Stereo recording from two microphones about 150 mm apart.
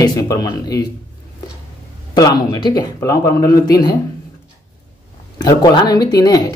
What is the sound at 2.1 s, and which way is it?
Speech, 25° left (ahead or behind).